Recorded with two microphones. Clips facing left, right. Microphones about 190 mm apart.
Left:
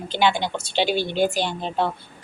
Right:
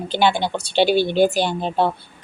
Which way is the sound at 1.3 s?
40° right (ahead or behind).